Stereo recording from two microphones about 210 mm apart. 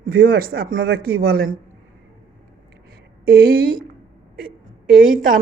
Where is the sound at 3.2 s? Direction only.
50° right (ahead or behind).